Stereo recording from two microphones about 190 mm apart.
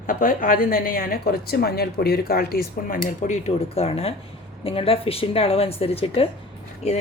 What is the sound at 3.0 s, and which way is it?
A woman's voice, 40° left (ahead or behind).